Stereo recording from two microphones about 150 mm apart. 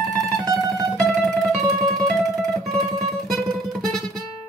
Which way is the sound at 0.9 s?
Centre (ahead or behind).